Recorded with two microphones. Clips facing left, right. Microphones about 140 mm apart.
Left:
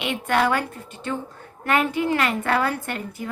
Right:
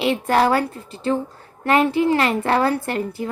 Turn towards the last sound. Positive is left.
turn(degrees=-30)  # may be behind; listen again after turning